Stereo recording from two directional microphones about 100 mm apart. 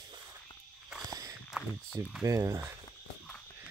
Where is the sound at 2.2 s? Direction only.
30° right (ahead or behind).